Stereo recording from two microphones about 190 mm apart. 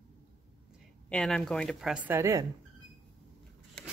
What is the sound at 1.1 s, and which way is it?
Speech, 5° left (ahead or behind).